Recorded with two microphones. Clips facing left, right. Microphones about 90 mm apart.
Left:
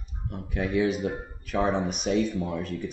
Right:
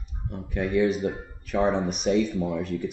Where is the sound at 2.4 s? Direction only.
15° right (ahead or behind).